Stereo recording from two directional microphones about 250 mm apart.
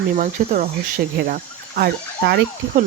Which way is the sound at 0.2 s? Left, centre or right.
Right.